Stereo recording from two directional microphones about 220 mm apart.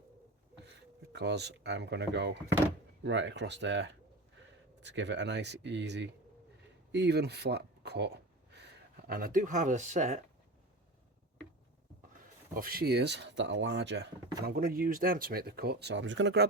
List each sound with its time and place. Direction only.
1.1 s speech: 50° right (ahead or behind); by 10.2 s 35° right (ahead or behind)
12.5 s speech: 40° right (ahead or behind)